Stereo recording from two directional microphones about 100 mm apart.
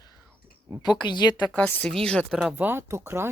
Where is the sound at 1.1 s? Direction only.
50° left (ahead or behind).